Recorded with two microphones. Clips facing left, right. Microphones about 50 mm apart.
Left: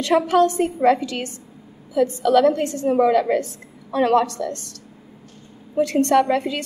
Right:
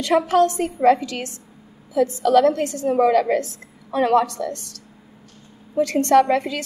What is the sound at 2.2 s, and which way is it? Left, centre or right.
Speech, left.